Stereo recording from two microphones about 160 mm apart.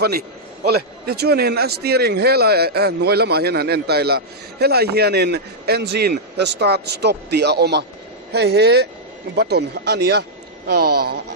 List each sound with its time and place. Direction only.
0.7 s speech: 75° right (ahead or behind)